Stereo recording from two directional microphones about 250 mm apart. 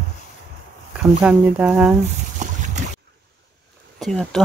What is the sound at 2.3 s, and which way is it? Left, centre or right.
Boat, right.